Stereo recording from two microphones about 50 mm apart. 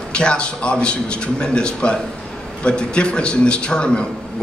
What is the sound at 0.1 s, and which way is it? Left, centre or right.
A man's voice, left.